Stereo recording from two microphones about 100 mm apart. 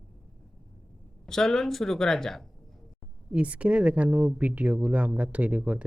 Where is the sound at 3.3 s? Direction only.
15° right (ahead or behind).